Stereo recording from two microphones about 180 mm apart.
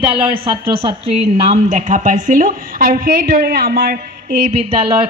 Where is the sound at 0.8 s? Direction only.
30° right (ahead or behind).